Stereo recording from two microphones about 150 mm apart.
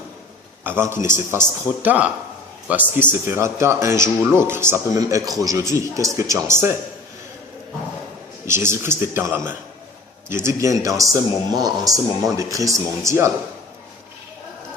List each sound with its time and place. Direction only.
0.6 s a man's voice: 15° right (ahead or behind)
8.4 s speech: 15° right (ahead or behind)
10.4 s speech: 20° right (ahead or behind)